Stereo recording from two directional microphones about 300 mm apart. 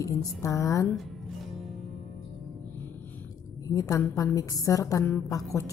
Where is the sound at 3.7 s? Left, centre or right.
Centre.